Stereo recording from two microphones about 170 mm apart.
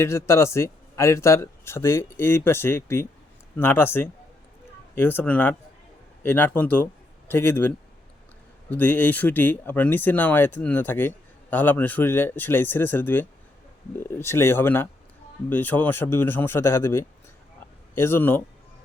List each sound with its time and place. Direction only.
0.0 s a man's voice: 15° left (ahead or behind)
8.7 s a man's voice: 10° left (ahead or behind)